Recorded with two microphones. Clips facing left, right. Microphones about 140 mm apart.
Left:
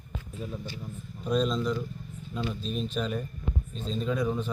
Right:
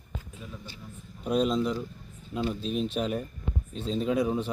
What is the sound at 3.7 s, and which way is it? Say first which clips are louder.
Speech: right 5 dB; 70° right (ahead or behind).